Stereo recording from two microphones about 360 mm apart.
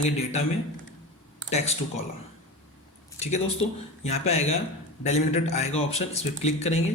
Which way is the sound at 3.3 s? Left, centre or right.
Centre.